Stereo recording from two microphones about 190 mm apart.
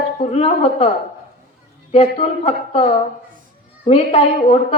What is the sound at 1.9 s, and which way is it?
Speech, 30° left (ahead or behind).